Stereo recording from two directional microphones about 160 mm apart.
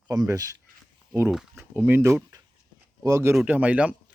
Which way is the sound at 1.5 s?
15° right (ahead or behind).